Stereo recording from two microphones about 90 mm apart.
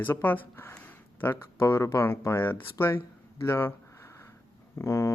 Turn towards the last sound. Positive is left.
turn(degrees=35)  # may be behind; listen again after turning